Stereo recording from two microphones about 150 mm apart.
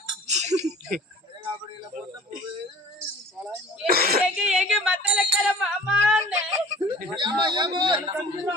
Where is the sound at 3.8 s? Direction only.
80° right.